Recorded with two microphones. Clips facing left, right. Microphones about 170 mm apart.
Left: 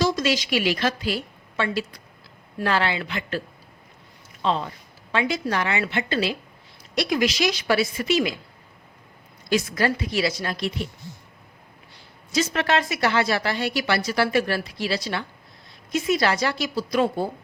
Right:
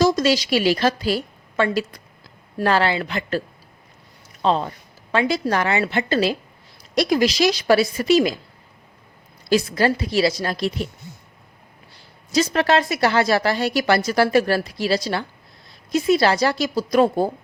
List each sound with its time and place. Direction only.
0.0 s a woman's voice: 40° right (ahead or behind)
4.4 s speech: 40° right (ahead or behind)
9.5 s speech: 30° right (ahead or behind)
12.3 s speech: 35° right (ahead or behind)